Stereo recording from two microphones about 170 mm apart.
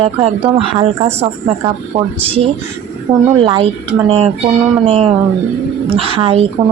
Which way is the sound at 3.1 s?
25° right (ahead or behind).